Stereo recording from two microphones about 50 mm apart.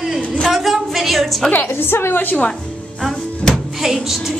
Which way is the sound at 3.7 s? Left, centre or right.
Centre.